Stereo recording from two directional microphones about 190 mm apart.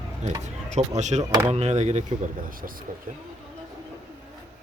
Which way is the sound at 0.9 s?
40° right (ahead or behind).